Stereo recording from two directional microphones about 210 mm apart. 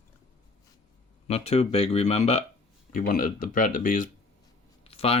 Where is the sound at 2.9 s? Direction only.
40° left (ahead or behind).